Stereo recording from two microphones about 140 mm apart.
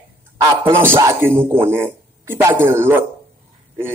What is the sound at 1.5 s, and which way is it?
A man's voice, 15° right (ahead or behind).